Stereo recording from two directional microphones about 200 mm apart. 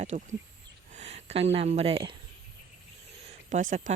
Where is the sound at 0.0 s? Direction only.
35° right (ahead or behind).